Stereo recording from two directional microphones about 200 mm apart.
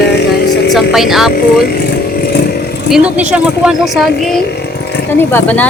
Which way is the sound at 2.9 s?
5° right (ahead or behind).